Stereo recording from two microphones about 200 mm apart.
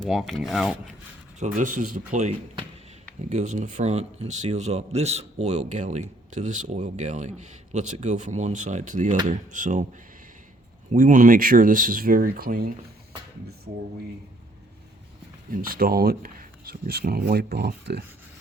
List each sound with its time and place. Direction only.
0.0 s speech: centre (ahead or behind)
1.5 s a man's voice: 40° right (ahead or behind)
10.9 s speech: 40° right (ahead or behind)
15.5 s speech: 45° right (ahead or behind)